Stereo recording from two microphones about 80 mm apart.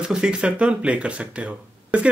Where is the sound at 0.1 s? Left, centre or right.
Centre.